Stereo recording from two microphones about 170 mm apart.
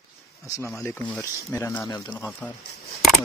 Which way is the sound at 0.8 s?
5° left (ahead or behind).